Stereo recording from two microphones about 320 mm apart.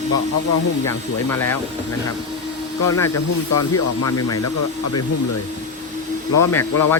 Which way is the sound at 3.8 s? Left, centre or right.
Left.